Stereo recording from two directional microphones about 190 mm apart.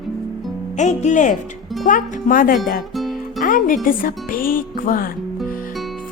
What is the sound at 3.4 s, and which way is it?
Speech, 45° left (ahead or behind).